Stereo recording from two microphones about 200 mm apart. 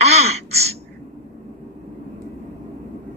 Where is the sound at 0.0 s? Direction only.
30° right (ahead or behind).